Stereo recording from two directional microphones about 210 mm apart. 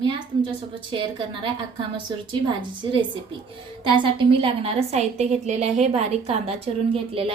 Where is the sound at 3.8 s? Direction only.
25° right (ahead or behind).